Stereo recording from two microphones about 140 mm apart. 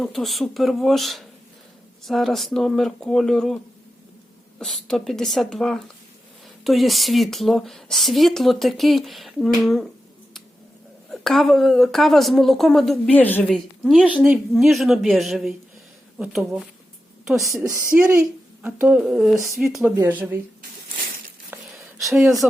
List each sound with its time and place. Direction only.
0.0 s speech: centre (ahead or behind)
4.6 s speech: 5° left (ahead or behind)
11.1 s speech: centre (ahead or behind)
17.6 s a woman's voice: 20° right (ahead or behind); by 19.9 s centre (ahead or behind)
20.0 s a woman's voice: 10° right (ahead or behind)
21.8 s a sound: centre (ahead or behind)